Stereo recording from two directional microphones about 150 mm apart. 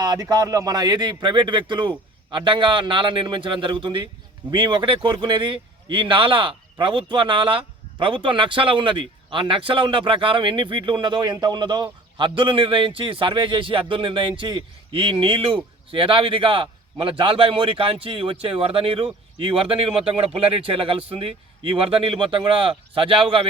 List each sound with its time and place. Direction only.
0.0 s a man's voice: 25° right (ahead or behind)